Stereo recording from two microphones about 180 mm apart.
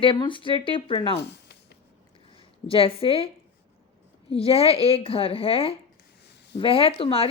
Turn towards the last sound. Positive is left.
turn(degrees=30)  # may be behind; listen again after turning